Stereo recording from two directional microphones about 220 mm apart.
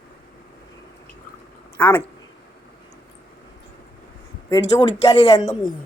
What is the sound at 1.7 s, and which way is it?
Speech, 10° left (ahead or behind).